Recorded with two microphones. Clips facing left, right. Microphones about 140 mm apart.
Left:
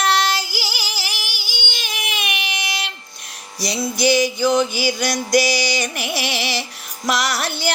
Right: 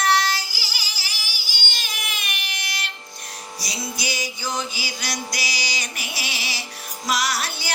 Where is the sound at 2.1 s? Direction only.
75° left (ahead or behind).